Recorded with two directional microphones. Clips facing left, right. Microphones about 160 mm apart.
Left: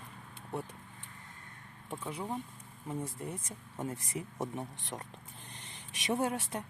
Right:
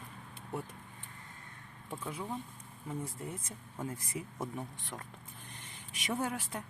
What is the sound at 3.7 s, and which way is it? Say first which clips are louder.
Speech: left 2 dB; 25° left (ahead or behind).